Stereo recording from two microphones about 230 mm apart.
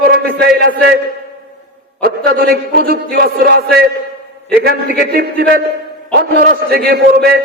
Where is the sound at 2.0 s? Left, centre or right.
Right.